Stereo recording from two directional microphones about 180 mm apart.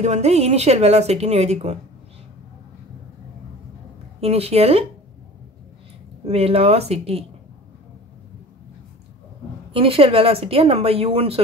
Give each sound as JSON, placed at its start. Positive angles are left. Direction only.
{"t": 0.0, "sound": "a woman's voice", "side_deg": -35}
{"t": 4.2, "sound": "a woman's voice", "side_deg": -35}
{"t": 6.2, "sound": "a woman's voice", "side_deg": -35}
{"t": 9.7, "sound": "a woman's voice", "side_deg": -30}